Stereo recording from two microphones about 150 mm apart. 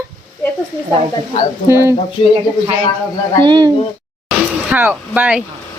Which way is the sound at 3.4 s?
30° right (ahead or behind).